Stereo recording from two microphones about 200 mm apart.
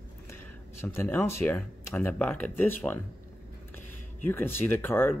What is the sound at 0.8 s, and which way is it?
Speech, 10° left (ahead or behind).